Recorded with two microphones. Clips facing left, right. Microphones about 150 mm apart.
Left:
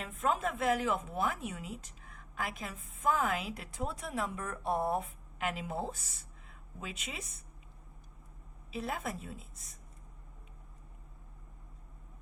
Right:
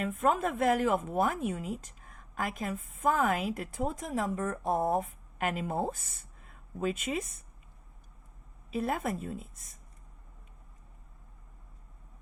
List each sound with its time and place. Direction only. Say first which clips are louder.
0.0 s speech: right 5 dB; 55° right (ahead or behind)
8.7 s speech: right 6 dB; 50° right (ahead or behind)